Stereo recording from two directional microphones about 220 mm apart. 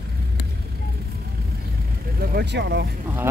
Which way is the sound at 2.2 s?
45° right (ahead or behind).